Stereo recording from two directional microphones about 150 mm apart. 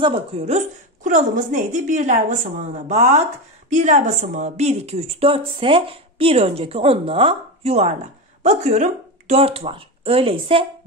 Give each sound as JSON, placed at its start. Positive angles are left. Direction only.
{"t": 0.0, "sound": "a woman's voice", "side_deg": -40}